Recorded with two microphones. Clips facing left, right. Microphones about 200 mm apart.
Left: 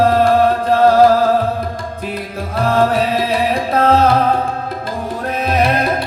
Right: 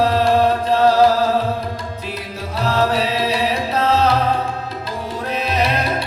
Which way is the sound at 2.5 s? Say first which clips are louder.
Left 4 dB; 50° left (ahead or behind).